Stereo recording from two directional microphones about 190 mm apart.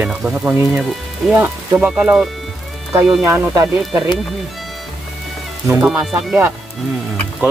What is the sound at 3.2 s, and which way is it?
Speech, 15° right (ahead or behind).